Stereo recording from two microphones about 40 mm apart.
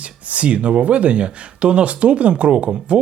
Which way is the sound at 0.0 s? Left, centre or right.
Right.